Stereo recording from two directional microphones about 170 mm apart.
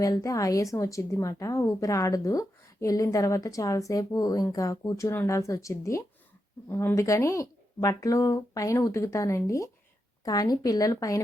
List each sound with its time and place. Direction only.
0.0 s a woman's voice: 20° left (ahead or behind)